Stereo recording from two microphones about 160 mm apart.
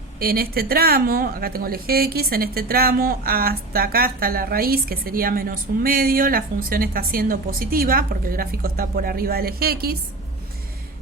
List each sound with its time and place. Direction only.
0.2 s a woman's voice: 70° right (ahead or behind)